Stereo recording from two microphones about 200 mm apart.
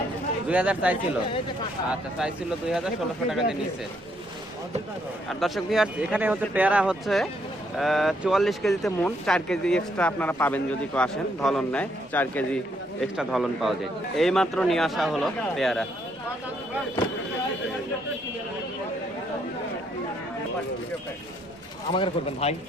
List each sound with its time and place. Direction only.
0.4 s speech: 5° right (ahead or behind)
5.3 s speech: centre (ahead or behind)
21.9 s speech: 30° left (ahead or behind)